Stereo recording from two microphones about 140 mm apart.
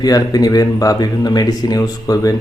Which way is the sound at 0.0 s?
30° left (ahead or behind).